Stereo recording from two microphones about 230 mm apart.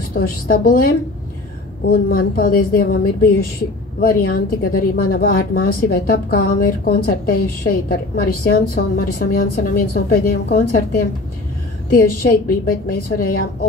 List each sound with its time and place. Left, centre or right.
0.1 s a woman's voice: left